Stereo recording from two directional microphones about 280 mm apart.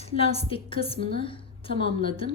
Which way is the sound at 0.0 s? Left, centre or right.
Left.